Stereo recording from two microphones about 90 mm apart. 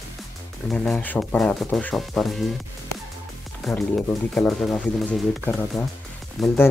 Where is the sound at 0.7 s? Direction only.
15° left (ahead or behind).